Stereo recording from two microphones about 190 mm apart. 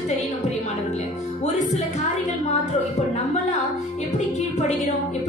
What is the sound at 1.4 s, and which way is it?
Music, 35° left (ahead or behind).